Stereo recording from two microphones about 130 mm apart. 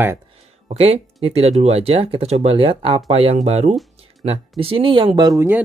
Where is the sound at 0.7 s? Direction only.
50° right (ahead or behind).